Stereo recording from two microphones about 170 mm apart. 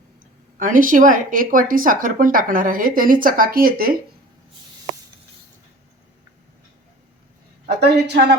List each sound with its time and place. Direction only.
0.5 s a woman's voice: 50° right (ahead or behind)
7.8 s speech: 75° right (ahead or behind)